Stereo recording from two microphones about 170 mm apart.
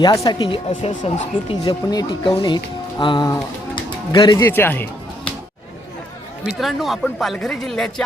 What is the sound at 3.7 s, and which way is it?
Music, 25° left (ahead or behind).